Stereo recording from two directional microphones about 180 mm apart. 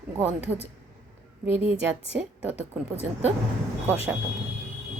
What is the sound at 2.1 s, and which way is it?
Speech, 10° right (ahead or behind).